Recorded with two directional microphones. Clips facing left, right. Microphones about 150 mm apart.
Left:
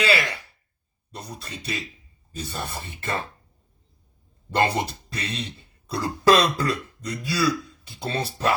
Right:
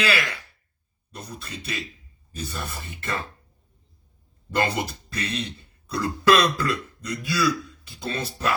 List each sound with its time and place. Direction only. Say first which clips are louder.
0.0 s speech: left 2 dB; 25° left (ahead or behind)
4.5 s speech: left 2 dB; 30° left (ahead or behind)